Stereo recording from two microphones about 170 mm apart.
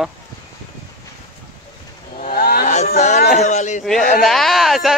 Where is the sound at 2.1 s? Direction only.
60° left (ahead or behind).